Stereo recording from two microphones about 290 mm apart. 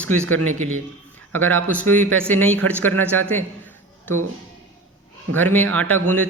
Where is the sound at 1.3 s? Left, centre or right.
Centre.